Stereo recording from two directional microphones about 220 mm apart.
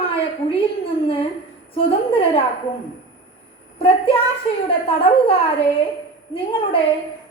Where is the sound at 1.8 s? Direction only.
25° left (ahead or behind).